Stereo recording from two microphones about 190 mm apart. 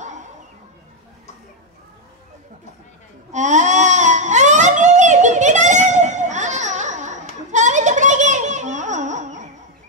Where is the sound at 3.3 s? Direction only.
40° right (ahead or behind).